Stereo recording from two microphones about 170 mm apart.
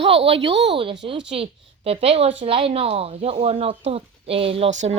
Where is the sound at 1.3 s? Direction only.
35° right (ahead or behind).